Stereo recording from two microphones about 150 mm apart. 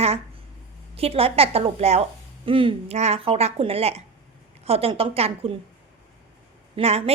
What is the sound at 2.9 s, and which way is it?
A woman's voice, 45° right (ahead or behind).